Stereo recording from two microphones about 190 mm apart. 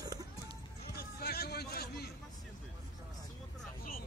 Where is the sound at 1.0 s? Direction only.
55° left (ahead or behind).